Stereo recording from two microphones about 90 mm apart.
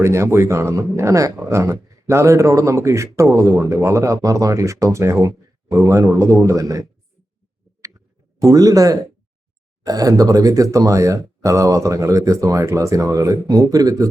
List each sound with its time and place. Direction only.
0.0 s speech: 30° right (ahead or behind)
8.4 s speech: 45° right (ahead or behind)